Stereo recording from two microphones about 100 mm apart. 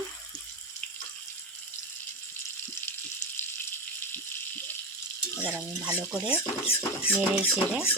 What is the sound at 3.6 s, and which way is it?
Water, 20° left (ahead or behind).